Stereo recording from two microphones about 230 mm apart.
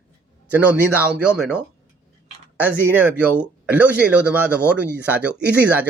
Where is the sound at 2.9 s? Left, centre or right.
Centre.